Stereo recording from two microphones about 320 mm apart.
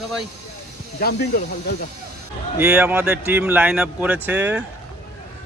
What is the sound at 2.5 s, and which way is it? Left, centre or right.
A man's voice, centre.